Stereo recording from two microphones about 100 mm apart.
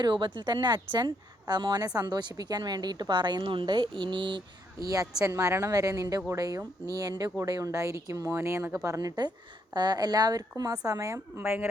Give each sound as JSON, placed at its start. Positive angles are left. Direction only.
{"t": 0.0, "sound": "a woman's voice", "side_deg": -50}
{"t": 5.2, "sound": "speech", "side_deg": -30}